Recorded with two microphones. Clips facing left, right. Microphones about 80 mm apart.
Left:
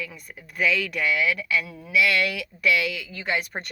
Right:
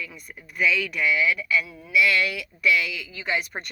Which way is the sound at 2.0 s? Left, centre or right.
Left.